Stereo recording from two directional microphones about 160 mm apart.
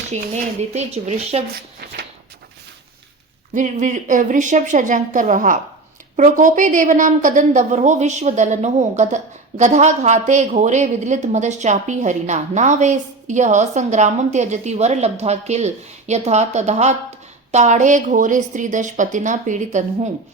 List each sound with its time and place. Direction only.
0.1 s a woman's voice: 45° right (ahead or behind)
3.5 s a woman's voice: 50° right (ahead or behind)